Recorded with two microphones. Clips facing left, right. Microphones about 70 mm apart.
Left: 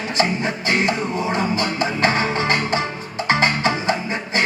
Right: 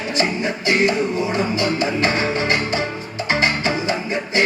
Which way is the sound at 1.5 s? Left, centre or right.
Left.